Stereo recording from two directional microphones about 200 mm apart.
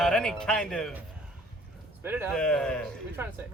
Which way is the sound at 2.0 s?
10° right (ahead or behind).